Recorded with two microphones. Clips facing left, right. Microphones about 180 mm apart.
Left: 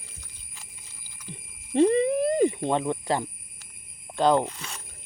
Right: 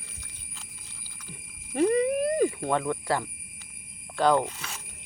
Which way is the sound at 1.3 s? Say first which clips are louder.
Left 4 dB; 25° left (ahead or behind).